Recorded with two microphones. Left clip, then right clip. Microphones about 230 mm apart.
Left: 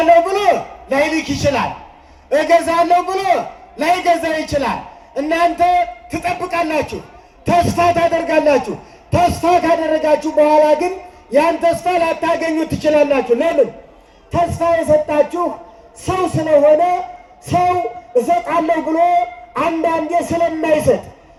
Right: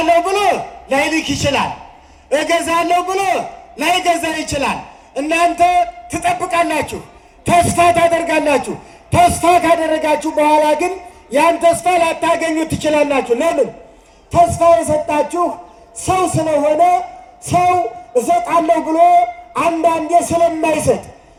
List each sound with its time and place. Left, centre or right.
0.0 s a man's voice: centre